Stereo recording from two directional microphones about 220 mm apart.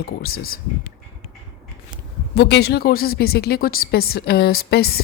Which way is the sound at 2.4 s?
50° left (ahead or behind).